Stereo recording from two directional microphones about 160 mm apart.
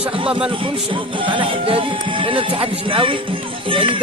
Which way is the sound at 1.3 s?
35° right (ahead or behind).